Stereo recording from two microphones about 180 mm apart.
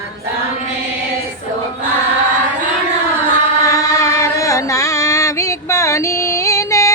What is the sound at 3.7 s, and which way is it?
Music, 15° left (ahead or behind).